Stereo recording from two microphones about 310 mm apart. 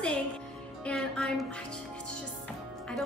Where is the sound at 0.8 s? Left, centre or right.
Centre.